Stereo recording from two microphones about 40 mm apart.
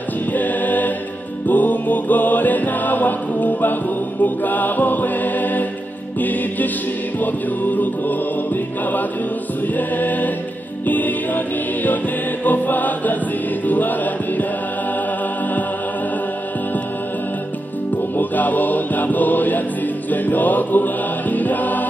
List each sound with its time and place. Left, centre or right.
0.3 s a capella: left
1.5 s music: left
9.8 s choir: left
10.9 s music: left
12.4 s choir: left
13.7 s chant: left
18.1 s chant: left
20.1 s music: left